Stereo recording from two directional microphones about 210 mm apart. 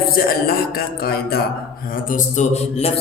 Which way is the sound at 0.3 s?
45° left (ahead or behind).